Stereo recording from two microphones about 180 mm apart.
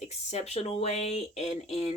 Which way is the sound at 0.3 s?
35° left (ahead or behind).